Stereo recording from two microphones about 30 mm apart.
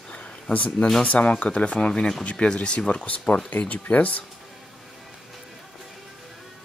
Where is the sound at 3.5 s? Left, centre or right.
Left.